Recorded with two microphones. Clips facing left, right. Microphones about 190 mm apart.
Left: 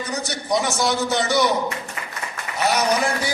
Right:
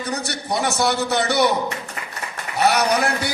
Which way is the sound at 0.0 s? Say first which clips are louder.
Right 1 dB; 60° right (ahead or behind).